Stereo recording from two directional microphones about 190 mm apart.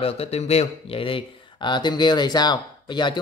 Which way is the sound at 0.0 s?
30° left (ahead or behind).